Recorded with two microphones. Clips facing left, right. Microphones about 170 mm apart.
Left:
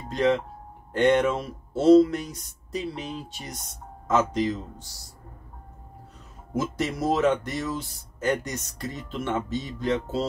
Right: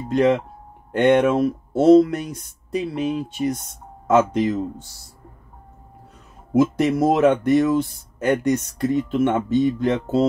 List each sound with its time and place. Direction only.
0.9 s speech: 55° right (ahead or behind)
6.6 s speech: 55° right (ahead or behind)